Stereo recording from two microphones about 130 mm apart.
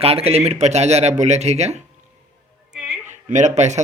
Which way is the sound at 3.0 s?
65° right (ahead or behind).